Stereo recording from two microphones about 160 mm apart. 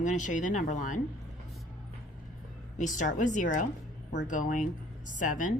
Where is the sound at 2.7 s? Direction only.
50° left (ahead or behind).